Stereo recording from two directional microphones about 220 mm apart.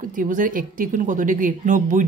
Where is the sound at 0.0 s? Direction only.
35° right (ahead or behind).